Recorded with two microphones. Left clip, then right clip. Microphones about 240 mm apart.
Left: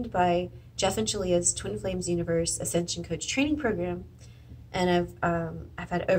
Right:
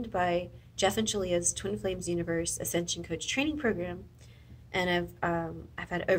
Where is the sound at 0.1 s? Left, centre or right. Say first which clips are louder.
Left 4 dB; right.